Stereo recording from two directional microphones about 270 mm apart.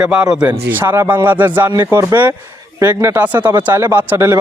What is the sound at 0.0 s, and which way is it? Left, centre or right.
A man's voice, centre.